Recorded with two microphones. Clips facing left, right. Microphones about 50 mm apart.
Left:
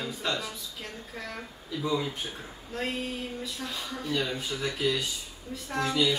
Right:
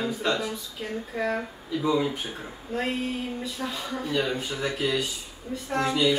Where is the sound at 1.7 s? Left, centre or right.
Centre.